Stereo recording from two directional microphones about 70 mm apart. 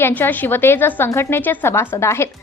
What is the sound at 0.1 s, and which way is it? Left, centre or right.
A woman's voice, left.